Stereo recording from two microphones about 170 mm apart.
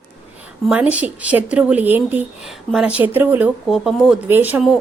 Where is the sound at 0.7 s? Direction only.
10° right (ahead or behind).